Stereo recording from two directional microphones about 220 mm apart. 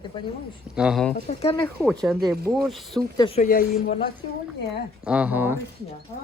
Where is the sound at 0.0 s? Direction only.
20° left (ahead or behind).